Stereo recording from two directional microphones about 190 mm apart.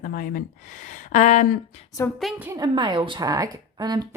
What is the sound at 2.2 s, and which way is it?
Speech, 5° right (ahead or behind).